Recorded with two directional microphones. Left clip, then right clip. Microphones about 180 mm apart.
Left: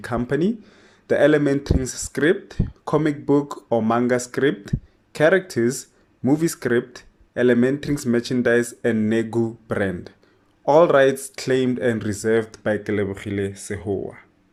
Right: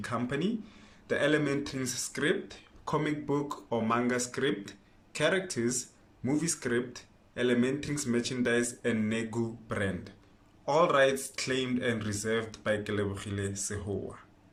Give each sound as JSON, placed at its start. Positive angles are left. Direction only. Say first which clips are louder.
{"t": 0.0, "sound": "speech", "louder": "left 10 dB", "side_deg": 45}